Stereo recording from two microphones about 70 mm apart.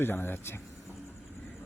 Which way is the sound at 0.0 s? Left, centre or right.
Left.